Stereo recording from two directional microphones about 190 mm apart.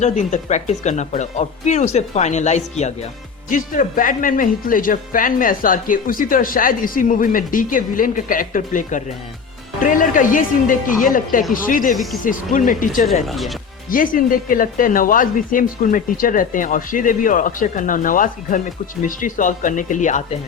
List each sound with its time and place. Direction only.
0.0 s speech: 40° left (ahead or behind)
13.2 s speech: centre (ahead or behind)
13.9 s speech: 45° left (ahead or behind)